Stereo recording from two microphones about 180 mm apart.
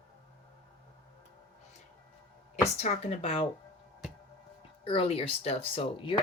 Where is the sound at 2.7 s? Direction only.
35° left (ahead or behind).